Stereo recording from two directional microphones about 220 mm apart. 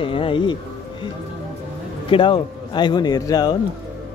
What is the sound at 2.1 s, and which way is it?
A man's voice, 25° left (ahead or behind).